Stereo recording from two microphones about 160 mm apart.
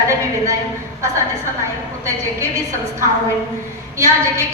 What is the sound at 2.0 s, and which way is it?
A woman's voice, 20° right (ahead or behind).